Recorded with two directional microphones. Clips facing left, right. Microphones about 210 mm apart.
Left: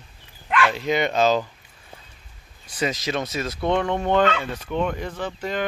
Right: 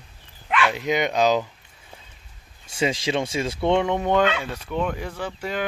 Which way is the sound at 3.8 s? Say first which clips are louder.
Even; 10° right (ahead or behind).